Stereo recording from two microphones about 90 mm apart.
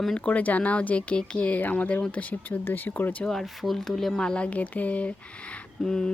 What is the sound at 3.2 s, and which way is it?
Speech, 5° left (ahead or behind).